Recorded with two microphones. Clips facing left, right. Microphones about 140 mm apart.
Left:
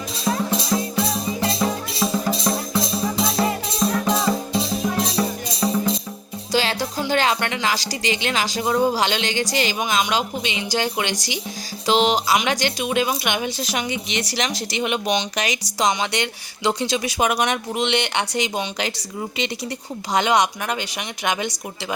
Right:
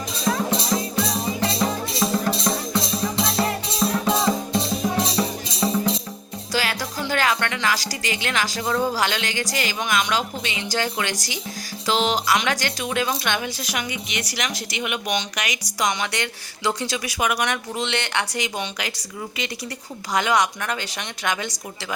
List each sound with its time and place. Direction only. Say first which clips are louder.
0.3 s music: left 1 dB; 5° left (ahead or behind)
6.5 s music: left 4 dB; 25° left (ahead or behind)
7.1 s speech: left 1 dB; 25° left (ahead or behind)
13.6 s speech: left 4 dB; 30° left (ahead or behind)
20.1 s speech: left 2 dB; 20° left (ahead or behind)